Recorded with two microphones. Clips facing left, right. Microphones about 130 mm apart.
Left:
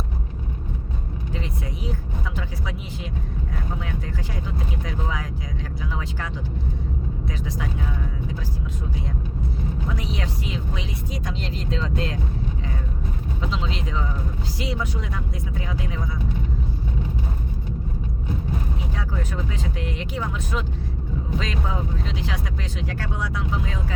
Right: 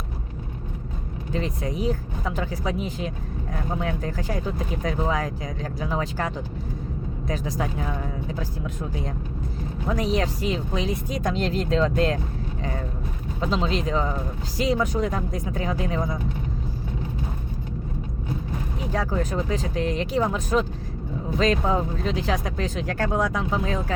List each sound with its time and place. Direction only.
1.3 s speech: 40° right (ahead or behind)
9.9 s speech: 45° right (ahead or behind)
13.4 s speech: 40° right (ahead or behind)
18.9 s speech: 40° right (ahead or behind)